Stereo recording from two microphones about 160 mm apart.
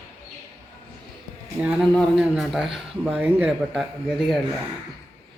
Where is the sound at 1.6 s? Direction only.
5° right (ahead or behind).